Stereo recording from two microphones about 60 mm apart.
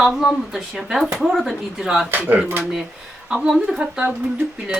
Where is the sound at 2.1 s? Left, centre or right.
Right.